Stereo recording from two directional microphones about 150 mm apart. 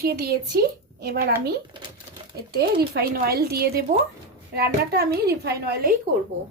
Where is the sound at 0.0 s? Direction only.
90° right.